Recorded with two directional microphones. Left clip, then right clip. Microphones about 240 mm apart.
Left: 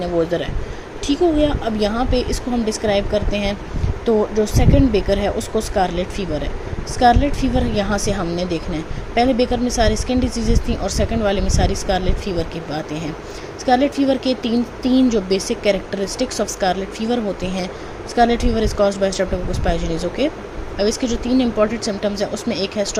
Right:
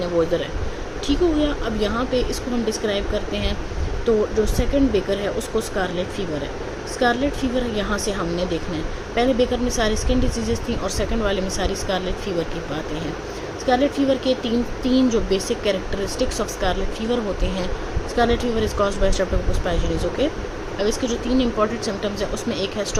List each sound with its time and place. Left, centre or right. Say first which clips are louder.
1.0 s speech: left 4 dB; centre